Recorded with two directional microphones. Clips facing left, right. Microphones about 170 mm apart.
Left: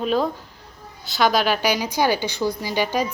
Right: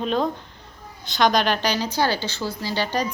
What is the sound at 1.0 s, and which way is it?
A woman's voice, 5° left (ahead or behind).